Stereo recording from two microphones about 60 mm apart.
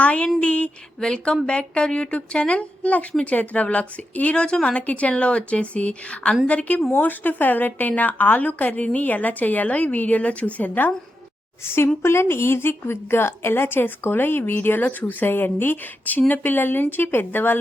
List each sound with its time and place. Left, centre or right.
0.0 s speech: left
0.3 s a sound: centre
11.6 s a woman's voice: left